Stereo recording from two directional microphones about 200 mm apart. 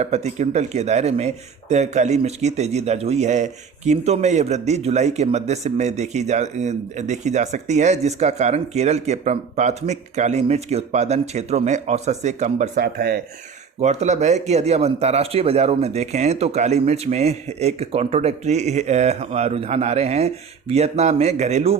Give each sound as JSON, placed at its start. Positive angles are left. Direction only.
{"t": 0.0, "sound": "a man's voice", "side_deg": -35}
{"t": 12.8, "sound": "speech", "side_deg": -50}
{"t": 13.8, "sound": "a man's voice", "side_deg": -35}